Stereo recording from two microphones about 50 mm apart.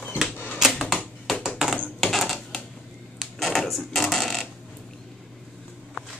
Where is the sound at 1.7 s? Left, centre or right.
Centre.